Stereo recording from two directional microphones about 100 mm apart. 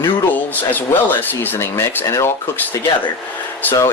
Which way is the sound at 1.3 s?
20° left (ahead or behind).